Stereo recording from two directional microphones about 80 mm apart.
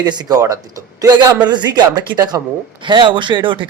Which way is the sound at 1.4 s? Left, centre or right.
Right.